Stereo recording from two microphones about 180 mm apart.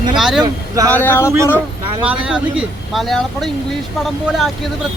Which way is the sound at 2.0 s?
5° right (ahead or behind).